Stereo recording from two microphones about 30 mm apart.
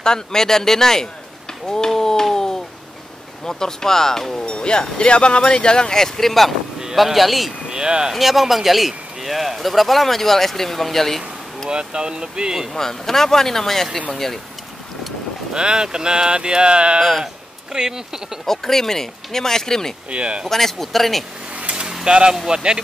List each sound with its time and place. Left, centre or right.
0.0 s speech: left
1.7 s a sound: centre
3.4 s speech: centre
4.4 s speech: left; by 7.5 s centre
7.7 s speech: right
8.1 s speech: centre
11.7 s speech: right
12.7 s speech: centre
15.5 s speech: right
17.7 s speech: centre
18.4 s speech: centre
20.1 s speech: right
20.4 s speech: centre
22.0 s speech: right